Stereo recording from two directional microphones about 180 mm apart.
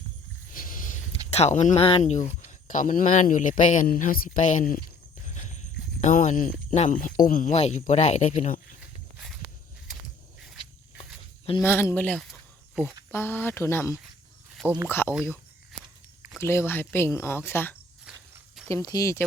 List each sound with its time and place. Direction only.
0.5 s a sound: 50° left (ahead or behind)
1.3 s speech: 35° left (ahead or behind)
9.1 s walk: centre (ahead or behind)
11.6 s speech: 15° left (ahead or behind)
16.4 s speech: 15° left (ahead or behind)
18.1 s walk: 5° right (ahead or behind)
18.7 s speech: 20° left (ahead or behind)